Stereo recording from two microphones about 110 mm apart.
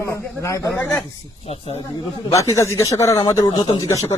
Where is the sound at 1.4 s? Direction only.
70° left (ahead or behind).